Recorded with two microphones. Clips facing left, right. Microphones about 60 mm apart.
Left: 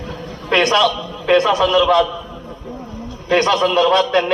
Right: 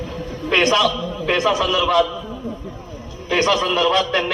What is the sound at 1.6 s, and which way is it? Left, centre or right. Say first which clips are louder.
Speech: left 5 dB; left.